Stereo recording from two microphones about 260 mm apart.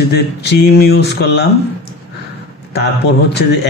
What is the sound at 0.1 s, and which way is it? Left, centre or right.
Speech, left.